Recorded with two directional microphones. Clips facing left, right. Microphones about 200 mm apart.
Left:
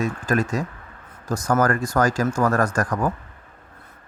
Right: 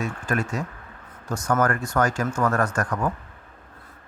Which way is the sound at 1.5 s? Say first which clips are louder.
Left 2 dB; 35° left (ahead or behind).